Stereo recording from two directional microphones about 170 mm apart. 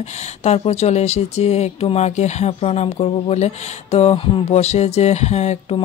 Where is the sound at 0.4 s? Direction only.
40° left (ahead or behind).